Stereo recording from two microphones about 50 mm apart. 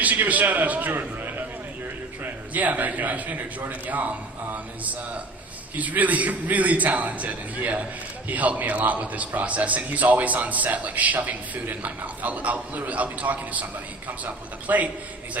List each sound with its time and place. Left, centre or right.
0.0 s a man's voice: right
5.7 s a man's voice: right